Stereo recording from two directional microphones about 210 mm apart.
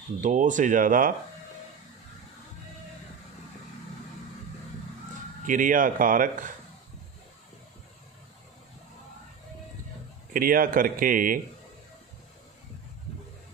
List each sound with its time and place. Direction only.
0.2 s speech: 35° right (ahead or behind)
5.5 s speech: 40° right (ahead or behind)
10.3 s speech: 40° right (ahead or behind)